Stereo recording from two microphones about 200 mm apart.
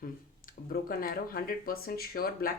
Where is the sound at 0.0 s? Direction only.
45° left (ahead or behind).